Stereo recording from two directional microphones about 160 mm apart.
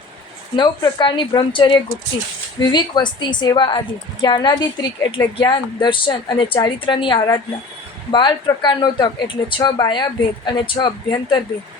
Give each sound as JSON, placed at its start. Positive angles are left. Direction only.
{"t": 0.5, "sound": "speech", "side_deg": 25}